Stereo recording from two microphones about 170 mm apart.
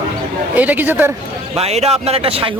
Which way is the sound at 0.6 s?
10° right (ahead or behind).